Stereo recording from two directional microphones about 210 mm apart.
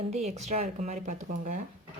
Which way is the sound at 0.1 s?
30° right (ahead or behind).